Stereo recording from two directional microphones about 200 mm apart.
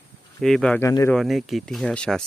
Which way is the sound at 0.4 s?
5° left (ahead or behind).